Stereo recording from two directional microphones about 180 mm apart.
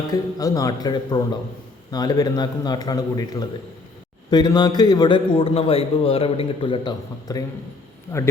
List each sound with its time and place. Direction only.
0.1 s a man's voice: 20° left (ahead or behind)